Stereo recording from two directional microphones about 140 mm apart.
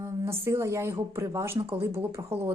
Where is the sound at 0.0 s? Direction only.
20° right (ahead or behind).